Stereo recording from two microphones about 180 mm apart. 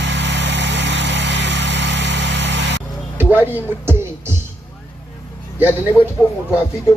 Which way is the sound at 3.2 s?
10° right (ahead or behind).